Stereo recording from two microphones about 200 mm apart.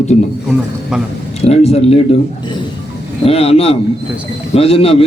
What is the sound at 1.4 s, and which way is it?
Speech, 30° left (ahead or behind).